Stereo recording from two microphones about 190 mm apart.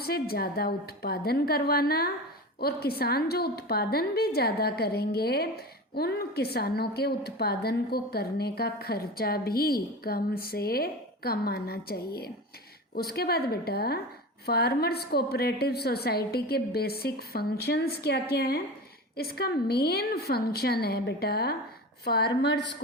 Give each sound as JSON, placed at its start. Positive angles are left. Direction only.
{"t": 0.0, "sound": "a woman's voice", "side_deg": 55}